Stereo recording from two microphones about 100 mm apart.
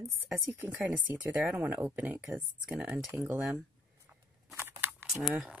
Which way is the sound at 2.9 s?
20° right (ahead or behind).